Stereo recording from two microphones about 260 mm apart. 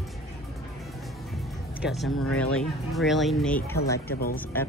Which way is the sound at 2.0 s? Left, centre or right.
Left.